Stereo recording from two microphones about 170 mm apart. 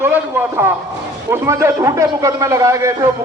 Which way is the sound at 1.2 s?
15° right (ahead or behind).